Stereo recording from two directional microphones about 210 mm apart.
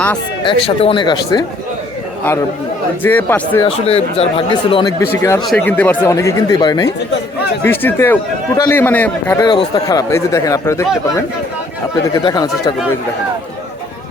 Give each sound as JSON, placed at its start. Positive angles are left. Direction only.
{"t": 0.4, "sound": "speech", "side_deg": 25}
{"t": 3.0, "sound": "a man's voice", "side_deg": 10}
{"t": 3.7, "sound": "a man's voice", "side_deg": 30}
{"t": 5.4, "sound": "a man's voice", "side_deg": 5}
{"t": 7.6, "sound": "a man's voice", "side_deg": 10}
{"t": 9.4, "sound": "a man's voice", "side_deg": 20}
{"t": 12.1, "sound": "a man's voice", "side_deg": 20}